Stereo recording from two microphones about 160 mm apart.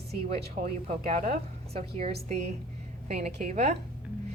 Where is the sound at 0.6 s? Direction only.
45° right (ahead or behind).